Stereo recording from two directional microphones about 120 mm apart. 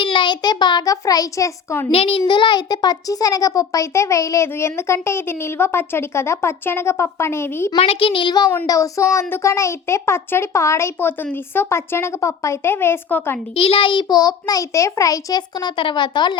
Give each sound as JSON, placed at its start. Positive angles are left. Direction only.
{"t": 0.0, "sound": "a child's voice", "side_deg": 45}
{"t": 1.9, "sound": "a child's voice", "side_deg": 50}
{"t": 7.8, "sound": "a child's voice", "side_deg": 55}
{"t": 8.6, "sound": "a child's voice", "side_deg": 25}
{"t": 13.6, "sound": "a child's voice", "side_deg": 50}